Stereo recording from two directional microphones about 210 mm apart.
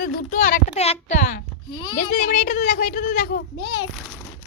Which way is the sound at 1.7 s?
20° left (ahead or behind).